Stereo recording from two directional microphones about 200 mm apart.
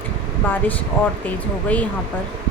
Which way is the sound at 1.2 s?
5° left (ahead or behind).